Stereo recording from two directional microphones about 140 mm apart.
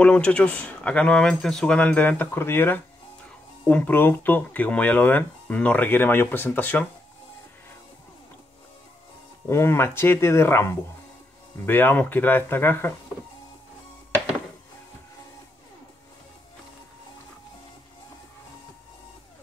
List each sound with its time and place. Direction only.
0.0 s speech: 10° left (ahead or behind)
9.5 s speech: 15° left (ahead or behind)